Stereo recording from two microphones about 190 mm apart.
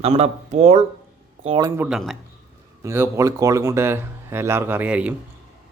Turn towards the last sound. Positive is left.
turn(degrees=-5)  # may be behind; listen again after turning